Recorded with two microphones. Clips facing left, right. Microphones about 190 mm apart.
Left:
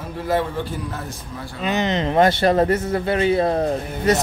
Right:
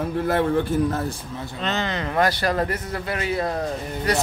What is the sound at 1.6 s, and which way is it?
Speech, 15° left (ahead or behind).